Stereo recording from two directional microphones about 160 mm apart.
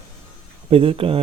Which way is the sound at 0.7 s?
35° right (ahead or behind).